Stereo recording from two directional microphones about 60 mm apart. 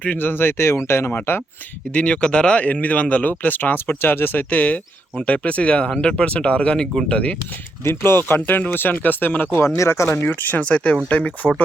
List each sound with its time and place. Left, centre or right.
0.0 s speech: left
1.9 s speech: left
7.9 s speech: left
9.6 s speech: left
10.2 s speech: left
10.6 s speech: centre